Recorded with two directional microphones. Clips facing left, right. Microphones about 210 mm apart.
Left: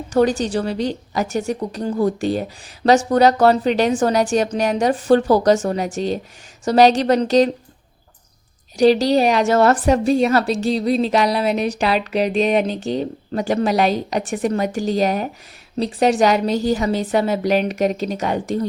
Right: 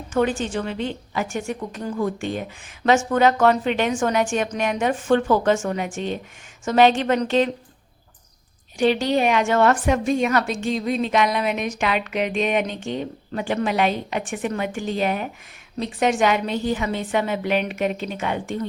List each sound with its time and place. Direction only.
0.1 s a woman's voice: 40° left (ahead or behind)
8.8 s a woman's voice: 35° left (ahead or behind)